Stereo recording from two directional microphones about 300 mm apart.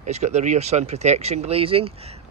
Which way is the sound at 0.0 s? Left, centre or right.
Right.